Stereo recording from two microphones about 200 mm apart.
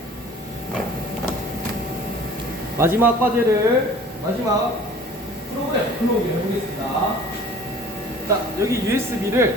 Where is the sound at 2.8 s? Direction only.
10° right (ahead or behind).